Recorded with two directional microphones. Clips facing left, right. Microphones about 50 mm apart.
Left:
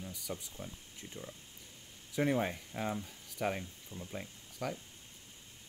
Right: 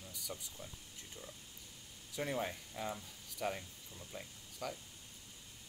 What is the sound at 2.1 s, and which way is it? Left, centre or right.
Speech, left.